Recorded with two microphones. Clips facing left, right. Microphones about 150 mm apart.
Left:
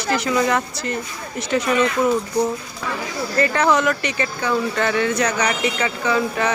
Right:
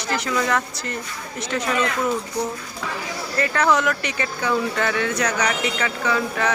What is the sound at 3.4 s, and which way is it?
Speech, centre (ahead or behind).